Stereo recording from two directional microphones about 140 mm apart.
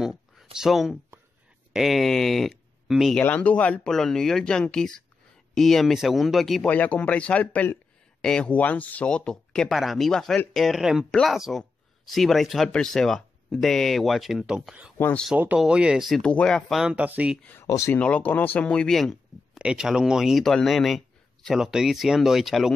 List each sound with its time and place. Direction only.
0.0 s a sound: centre (ahead or behind)
0.6 s speech: centre (ahead or behind)
3.2 s speech: 10° left (ahead or behind)
6.7 s speech: 10° left (ahead or behind); by 14.9 s 5° right (ahead or behind)
15.0 s speech: 15° left (ahead or behind)
15.3 s speech: 10° right (ahead or behind)
16.8 s speech: 10° right (ahead or behind)
17.4 s speech: 10° left (ahead or behind)
17.9 s speech: 10° left (ahead or behind)